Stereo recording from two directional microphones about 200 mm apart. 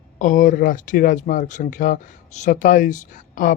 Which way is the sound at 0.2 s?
40° left (ahead or behind).